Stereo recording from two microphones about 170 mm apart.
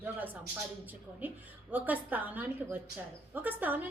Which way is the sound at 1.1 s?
10° right (ahead or behind).